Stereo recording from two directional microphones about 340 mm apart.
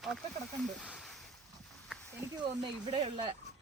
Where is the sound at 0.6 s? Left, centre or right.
Centre.